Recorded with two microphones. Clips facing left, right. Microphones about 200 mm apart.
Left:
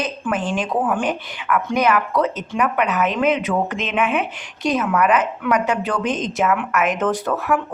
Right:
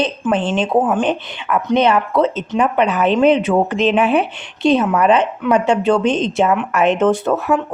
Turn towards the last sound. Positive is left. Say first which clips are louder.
# right 4 dB
turn(degrees=-25)  # may be behind; listen again after turning